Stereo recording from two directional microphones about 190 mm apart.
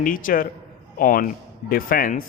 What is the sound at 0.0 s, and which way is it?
A man's voice, 45° left (ahead or behind).